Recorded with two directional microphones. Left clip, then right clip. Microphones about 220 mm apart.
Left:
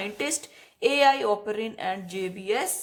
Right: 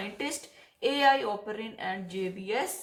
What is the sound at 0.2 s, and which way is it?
Speech, 50° left (ahead or behind).